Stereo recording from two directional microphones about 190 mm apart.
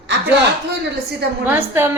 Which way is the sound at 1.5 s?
10° right (ahead or behind).